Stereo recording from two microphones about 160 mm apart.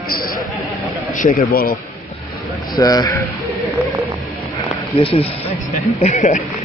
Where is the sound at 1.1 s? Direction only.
55° left (ahead or behind).